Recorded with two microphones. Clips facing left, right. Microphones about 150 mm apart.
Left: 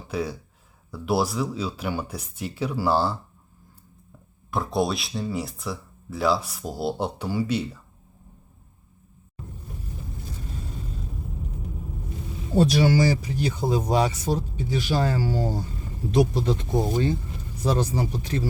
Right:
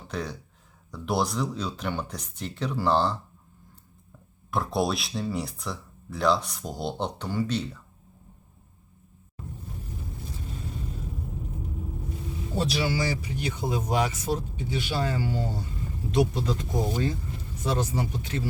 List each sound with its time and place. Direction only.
0.1 s speech: 5° left (ahead or behind)
4.5 s speech: centre (ahead or behind)
12.5 s speech: 45° left (ahead or behind)
17.6 s speech: 35° left (ahead or behind)